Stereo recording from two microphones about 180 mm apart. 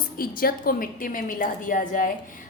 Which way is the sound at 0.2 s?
55° left (ahead or behind).